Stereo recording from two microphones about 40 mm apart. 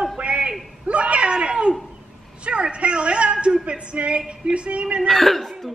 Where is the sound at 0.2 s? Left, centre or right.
Right.